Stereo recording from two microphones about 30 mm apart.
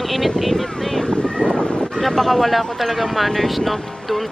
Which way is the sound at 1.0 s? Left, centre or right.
Left.